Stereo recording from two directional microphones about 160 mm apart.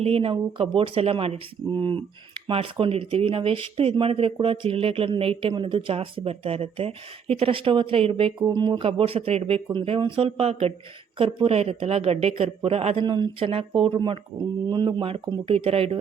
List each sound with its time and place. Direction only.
0.0 s speech: 35° right (ahead or behind)